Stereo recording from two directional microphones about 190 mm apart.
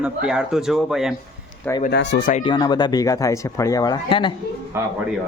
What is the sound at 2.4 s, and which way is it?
Speech, 25° left (ahead or behind).